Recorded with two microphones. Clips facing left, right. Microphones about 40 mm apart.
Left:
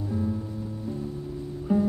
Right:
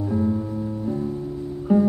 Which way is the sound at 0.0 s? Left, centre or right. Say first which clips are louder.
Right 7 dB; right.